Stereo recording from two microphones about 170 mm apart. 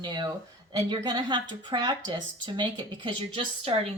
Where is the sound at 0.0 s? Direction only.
25° right (ahead or behind).